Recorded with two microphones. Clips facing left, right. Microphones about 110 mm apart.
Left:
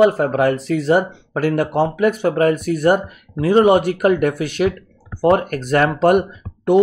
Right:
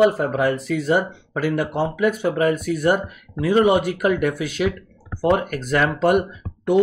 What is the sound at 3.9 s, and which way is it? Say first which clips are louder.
Speech: left 4 dB; 45° left (ahead or behind).